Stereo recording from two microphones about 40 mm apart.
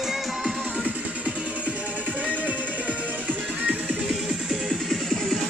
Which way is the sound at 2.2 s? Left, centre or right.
Right.